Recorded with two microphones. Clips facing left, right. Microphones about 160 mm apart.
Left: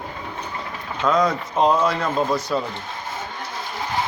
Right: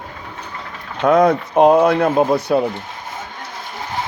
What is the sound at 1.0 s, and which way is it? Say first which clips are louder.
Speech: right 7 dB; 60° right (ahead or behind).